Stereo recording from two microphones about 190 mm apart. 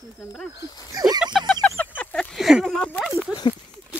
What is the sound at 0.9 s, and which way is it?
Speech, 20° right (ahead or behind).